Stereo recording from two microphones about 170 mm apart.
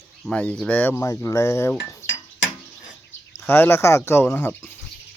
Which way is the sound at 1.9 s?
15° left (ahead or behind).